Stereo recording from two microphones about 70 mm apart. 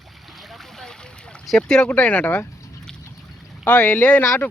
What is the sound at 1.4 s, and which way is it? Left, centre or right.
Speech, centre.